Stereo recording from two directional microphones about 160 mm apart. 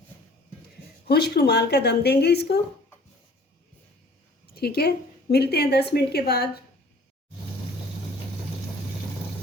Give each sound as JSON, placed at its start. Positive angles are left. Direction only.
{"t": 1.0, "sound": "speech", "side_deg": 85}
{"t": 4.5, "sound": "a woman's voice", "side_deg": 80}